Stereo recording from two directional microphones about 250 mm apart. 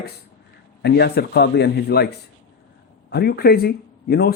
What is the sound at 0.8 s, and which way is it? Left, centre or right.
A man's voice, left.